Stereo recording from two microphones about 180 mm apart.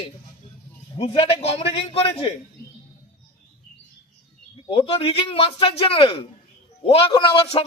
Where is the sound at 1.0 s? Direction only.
30° left (ahead or behind).